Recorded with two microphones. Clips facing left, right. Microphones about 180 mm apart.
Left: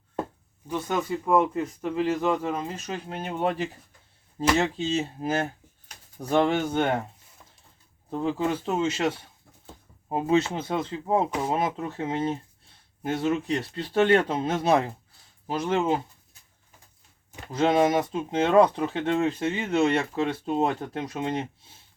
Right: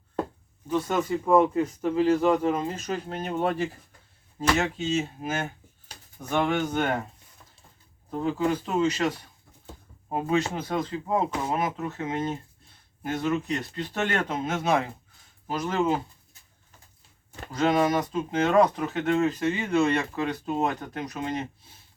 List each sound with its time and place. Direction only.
1.2 s speech: centre (ahead or behind)
4.4 s speech: 30° left (ahead or behind)
8.2 s speech: 25° left (ahead or behind)
17.5 s speech: 25° left (ahead or behind)